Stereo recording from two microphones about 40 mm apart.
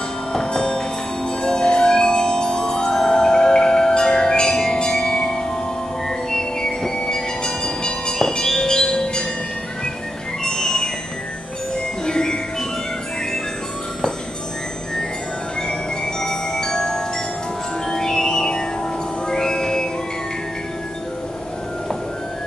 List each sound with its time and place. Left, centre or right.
0.3 s music: centre
10.4 s music: centre
16.2 s music: centre